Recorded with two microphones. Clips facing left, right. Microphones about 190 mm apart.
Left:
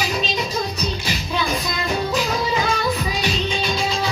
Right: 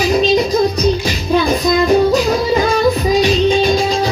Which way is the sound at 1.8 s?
40° right (ahead or behind).